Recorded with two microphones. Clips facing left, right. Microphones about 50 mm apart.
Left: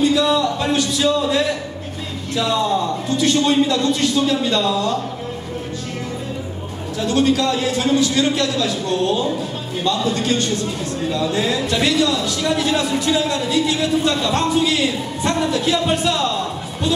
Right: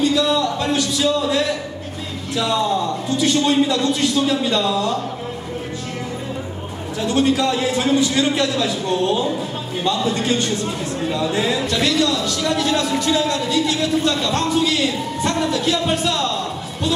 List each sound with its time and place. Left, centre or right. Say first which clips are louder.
0.0 s a sound: left 1 dB; centre
2.3 s a man's voice: left 1 dB; centre
7.1 s a man's voice: left 1 dB; right
11.7 s a man's voice: left 2 dB; centre